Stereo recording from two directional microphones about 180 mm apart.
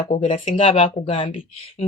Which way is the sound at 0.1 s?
30° left (ahead or behind).